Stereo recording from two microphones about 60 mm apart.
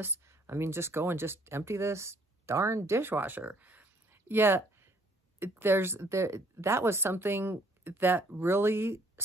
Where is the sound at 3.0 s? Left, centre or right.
Right.